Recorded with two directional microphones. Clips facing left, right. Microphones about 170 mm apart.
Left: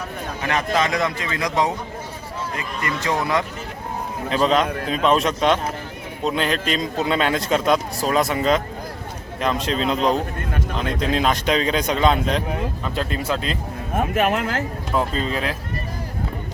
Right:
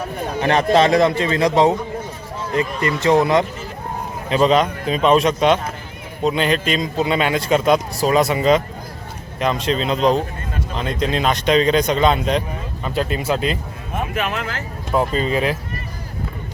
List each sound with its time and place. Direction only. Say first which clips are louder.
0.4 s a man's voice: right 7 dB; 30° right (ahead or behind)
4.3 s a man's voice: right 3 dB; centre (ahead or behind)
13.9 s speech: left 3 dB; 50° left (ahead or behind)
14.9 s a man's voice: right 4 dB; 5° right (ahead or behind)